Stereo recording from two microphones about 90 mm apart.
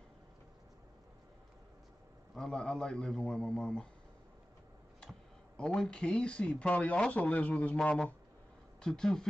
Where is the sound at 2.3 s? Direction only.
5° left (ahead or behind).